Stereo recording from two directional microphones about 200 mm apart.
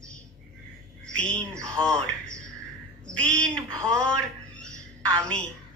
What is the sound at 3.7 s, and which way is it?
Speech, 15° right (ahead or behind).